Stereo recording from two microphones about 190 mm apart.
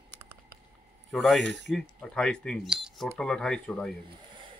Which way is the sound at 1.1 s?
Centre (ahead or behind).